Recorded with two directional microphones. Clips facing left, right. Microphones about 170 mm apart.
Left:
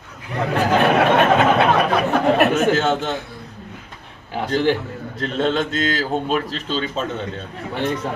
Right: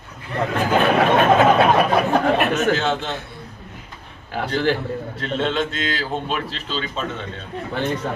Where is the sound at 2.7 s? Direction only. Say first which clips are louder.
Left 2 dB; 40° left (ahead or behind).